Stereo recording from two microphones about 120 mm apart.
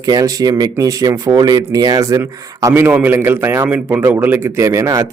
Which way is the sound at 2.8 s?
15° right (ahead or behind).